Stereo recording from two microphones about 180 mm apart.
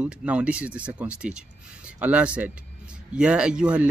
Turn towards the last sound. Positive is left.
turn(degrees=-5)  # may be behind; listen again after turning